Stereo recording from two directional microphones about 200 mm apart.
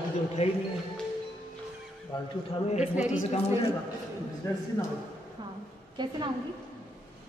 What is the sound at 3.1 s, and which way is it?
Speech, 35° left (ahead or behind).